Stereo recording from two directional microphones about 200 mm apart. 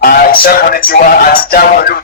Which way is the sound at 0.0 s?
45° left (ahead or behind).